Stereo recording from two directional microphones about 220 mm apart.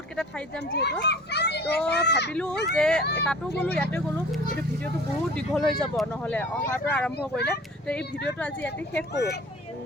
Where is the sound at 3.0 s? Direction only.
50° left (ahead or behind).